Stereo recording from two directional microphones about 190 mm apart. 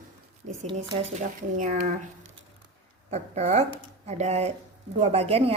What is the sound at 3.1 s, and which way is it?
A woman's voice, 35° right (ahead or behind).